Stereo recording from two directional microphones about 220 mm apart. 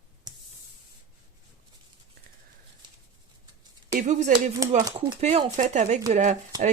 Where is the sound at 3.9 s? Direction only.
35° right (ahead or behind).